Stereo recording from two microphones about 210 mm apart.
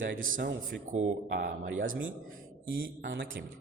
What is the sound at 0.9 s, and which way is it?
Speech, 35° right (ahead or behind).